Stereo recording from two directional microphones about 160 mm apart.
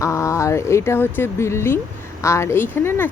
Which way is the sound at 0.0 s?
20° left (ahead or behind).